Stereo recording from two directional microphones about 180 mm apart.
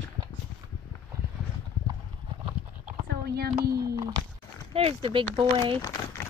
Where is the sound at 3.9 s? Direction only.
20° right (ahead or behind).